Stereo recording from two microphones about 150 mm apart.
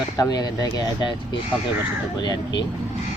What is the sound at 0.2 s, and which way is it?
Speech, 25° left (ahead or behind).